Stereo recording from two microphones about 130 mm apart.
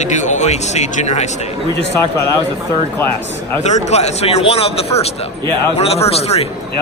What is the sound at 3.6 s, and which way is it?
A man's voice, 60° left (ahead or behind).